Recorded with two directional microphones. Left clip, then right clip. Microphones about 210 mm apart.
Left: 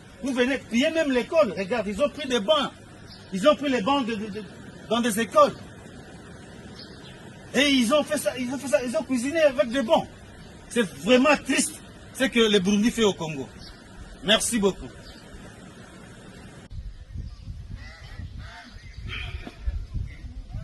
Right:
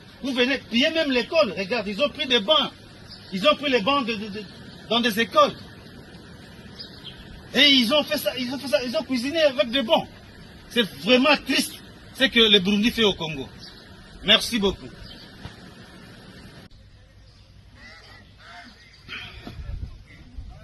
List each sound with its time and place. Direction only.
0.2 s speech: centre (ahead or behind)
3.4 s a man's voice: 25° right (ahead or behind)
4.9 s a man's voice: 10° right (ahead or behind)
7.5 s speech: centre (ahead or behind)
14.3 s a man's voice: 15° right (ahead or behind)